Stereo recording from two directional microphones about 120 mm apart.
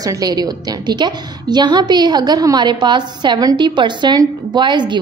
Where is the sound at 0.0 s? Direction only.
30° right (ahead or behind).